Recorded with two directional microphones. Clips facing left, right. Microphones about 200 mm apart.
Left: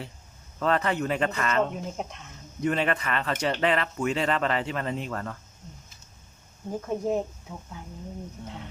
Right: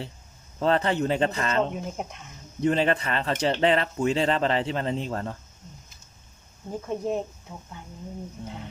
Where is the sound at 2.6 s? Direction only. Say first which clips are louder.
Right 3 dB; 30° right (ahead or behind).